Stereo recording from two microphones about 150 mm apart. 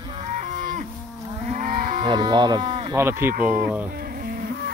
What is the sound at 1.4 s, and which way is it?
Moo, 60° right (ahead or behind).